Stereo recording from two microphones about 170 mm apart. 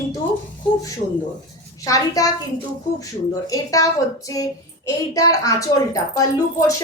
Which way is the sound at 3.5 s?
20° left (ahead or behind).